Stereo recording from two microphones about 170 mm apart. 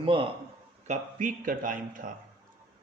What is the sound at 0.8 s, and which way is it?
A man's voice, 45° right (ahead or behind).